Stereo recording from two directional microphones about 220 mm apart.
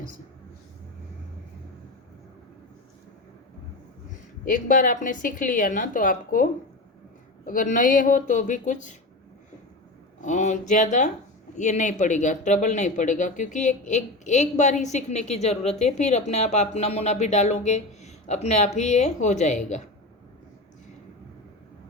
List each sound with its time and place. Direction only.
4.4 s speech: 40° left (ahead or behind)
10.2 s speech: 35° left (ahead or behind)